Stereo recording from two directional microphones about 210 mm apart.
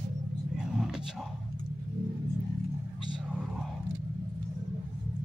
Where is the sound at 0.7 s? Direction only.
Centre (ahead or behind).